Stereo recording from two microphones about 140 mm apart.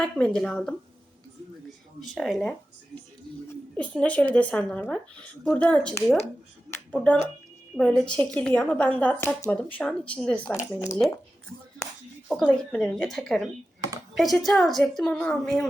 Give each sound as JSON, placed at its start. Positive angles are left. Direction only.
{"t": 0.0, "sound": "a woman's voice", "side_deg": 5}
{"t": 2.0, "sound": "a woman's voice", "side_deg": 0}
{"t": 6.7, "sound": "a sound", "side_deg": 10}
{"t": 7.8, "sound": "speech", "side_deg": 5}
{"t": 10.6, "sound": "speech", "side_deg": 20}
{"t": 12.7, "sound": "a woman's voice", "side_deg": 5}